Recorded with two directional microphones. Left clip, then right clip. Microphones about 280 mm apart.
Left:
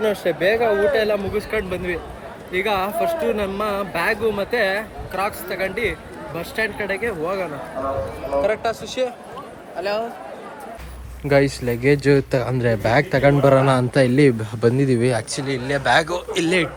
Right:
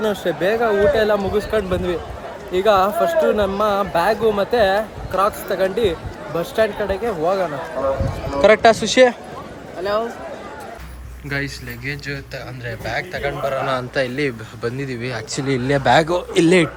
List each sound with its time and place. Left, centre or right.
0.1 s speech: centre
8.4 s speech: right
11.3 s speech: centre
15.4 s speech: centre